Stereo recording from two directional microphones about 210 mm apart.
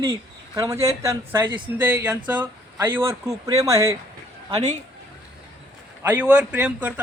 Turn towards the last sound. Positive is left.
turn(degrees=-10)  # may be behind; listen again after turning